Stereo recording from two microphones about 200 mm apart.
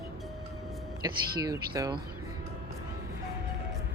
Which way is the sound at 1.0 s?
20° right (ahead or behind).